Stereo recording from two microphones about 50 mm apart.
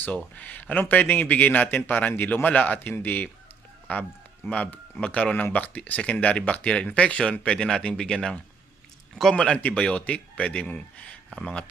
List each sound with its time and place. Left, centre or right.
0.3 s a man's voice: left